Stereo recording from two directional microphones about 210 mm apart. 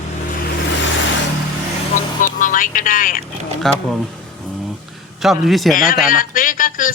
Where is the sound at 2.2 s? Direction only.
40° left (ahead or behind).